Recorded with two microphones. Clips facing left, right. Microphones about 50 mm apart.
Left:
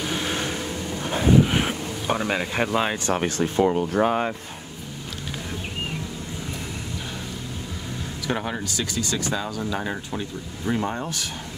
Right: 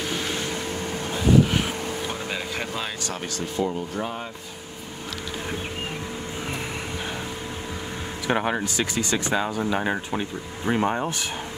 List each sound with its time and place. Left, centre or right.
1.5 s speech: left
3.6 s speech: left
8.3 s speech: right